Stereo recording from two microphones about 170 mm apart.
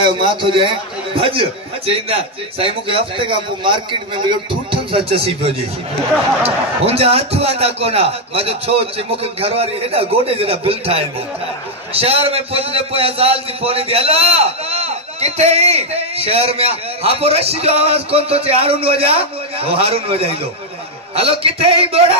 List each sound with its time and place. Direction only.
0.0 s a man's voice: 30° right (ahead or behind)